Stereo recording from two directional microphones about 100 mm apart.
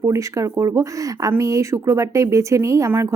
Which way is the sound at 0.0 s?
35° right (ahead or behind).